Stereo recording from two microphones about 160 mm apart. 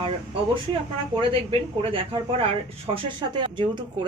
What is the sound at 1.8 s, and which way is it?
Speech, 35° right (ahead or behind).